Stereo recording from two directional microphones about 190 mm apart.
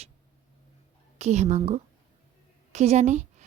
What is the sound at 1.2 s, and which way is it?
Speech, 35° right (ahead or behind).